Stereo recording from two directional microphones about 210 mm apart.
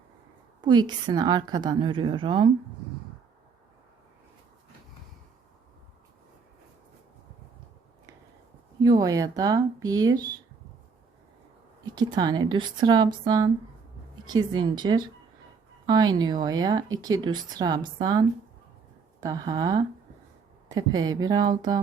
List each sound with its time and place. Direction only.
0.6 s speech: 20° right (ahead or behind)
8.8 s speech: 15° right (ahead or behind)
11.9 s speech: 20° right (ahead or behind)
14.5 s speech: 20° right (ahead or behind)